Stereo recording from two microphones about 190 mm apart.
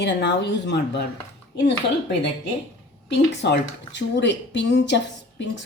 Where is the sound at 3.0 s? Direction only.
65° left (ahead or behind).